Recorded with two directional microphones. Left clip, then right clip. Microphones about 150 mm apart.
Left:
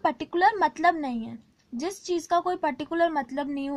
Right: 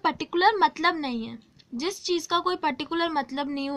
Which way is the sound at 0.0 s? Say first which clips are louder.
Even; 50° left (ahead or behind).